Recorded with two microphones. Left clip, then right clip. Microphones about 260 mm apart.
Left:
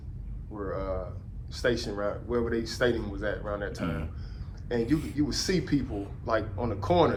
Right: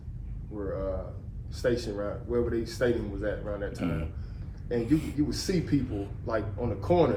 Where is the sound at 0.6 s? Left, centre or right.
Left.